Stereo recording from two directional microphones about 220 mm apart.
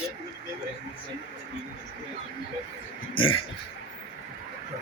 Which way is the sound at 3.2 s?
25° left (ahead or behind).